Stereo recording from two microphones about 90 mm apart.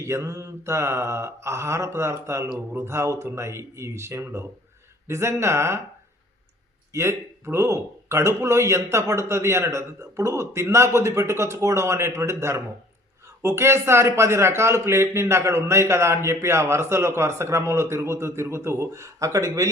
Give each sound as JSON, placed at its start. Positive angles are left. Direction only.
{"t": 0.0, "sound": "a man's voice", "side_deg": -35}
{"t": 6.9, "sound": "a man's voice", "side_deg": -30}